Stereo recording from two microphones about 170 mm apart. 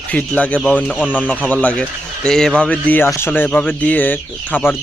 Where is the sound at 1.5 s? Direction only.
10° left (ahead or behind).